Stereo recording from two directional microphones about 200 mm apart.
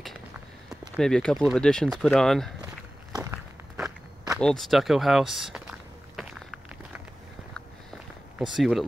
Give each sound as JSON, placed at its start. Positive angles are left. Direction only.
{"t": 0.9, "sound": "speech", "side_deg": 5}
{"t": 3.1, "sound": "a sound", "side_deg": -15}
{"t": 4.4, "sound": "walk", "side_deg": 5}
{"t": 8.4, "sound": "speech", "side_deg": 0}